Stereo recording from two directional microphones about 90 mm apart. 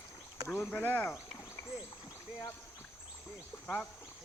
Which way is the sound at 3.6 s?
15° left (ahead or behind).